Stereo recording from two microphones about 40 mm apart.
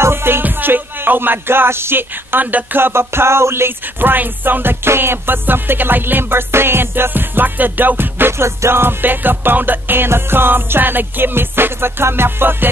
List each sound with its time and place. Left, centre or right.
0.0 s music: right
0.4 s speech: right
2.4 s speech: right
2.8 s music: right
4.0 s music: right
9.0 s music: right